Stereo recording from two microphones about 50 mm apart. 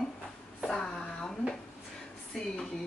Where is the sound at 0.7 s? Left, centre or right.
Centre.